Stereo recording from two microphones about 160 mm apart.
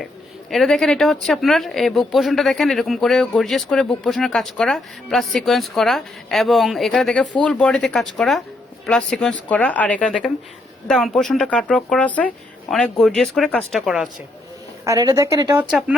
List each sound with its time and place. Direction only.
0.5 s speech: centre (ahead or behind)
14.8 s speech: 20° right (ahead or behind)